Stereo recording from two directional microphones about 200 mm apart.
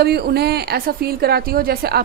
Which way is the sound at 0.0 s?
55° right (ahead or behind).